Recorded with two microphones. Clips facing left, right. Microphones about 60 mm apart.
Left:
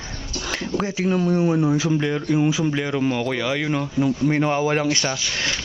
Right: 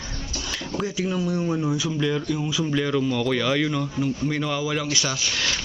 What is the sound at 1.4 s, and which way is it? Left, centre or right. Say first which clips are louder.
Speech: left 5 dB; left.